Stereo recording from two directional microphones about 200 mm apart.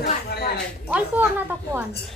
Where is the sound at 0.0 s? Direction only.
55° left (ahead or behind).